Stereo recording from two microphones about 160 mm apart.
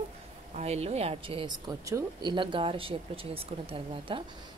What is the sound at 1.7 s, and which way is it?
Speech, 20° right (ahead or behind).